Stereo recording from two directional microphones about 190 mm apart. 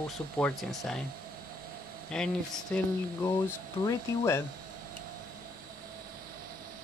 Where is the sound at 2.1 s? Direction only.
5° left (ahead or behind).